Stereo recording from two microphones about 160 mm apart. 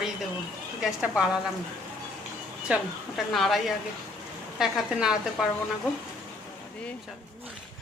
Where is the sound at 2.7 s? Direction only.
Centre (ahead or behind).